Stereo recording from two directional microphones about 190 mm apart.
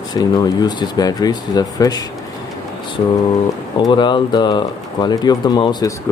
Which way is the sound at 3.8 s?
25° left (ahead or behind).